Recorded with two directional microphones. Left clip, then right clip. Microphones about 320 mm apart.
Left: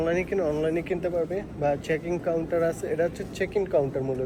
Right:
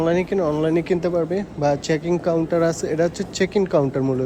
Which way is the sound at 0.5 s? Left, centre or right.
Right.